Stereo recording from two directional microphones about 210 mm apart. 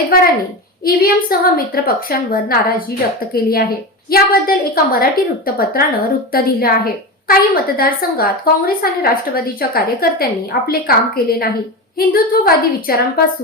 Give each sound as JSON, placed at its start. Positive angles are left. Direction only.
{"t": 0.9, "sound": "a woman's voice", "side_deg": 45}